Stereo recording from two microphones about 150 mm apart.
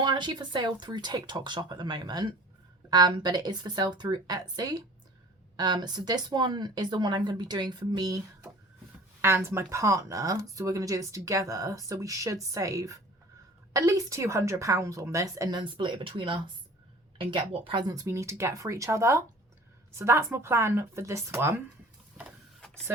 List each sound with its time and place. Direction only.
0.0 s speech: 30° right (ahead or behind)
9.2 s speech: 15° right (ahead or behind)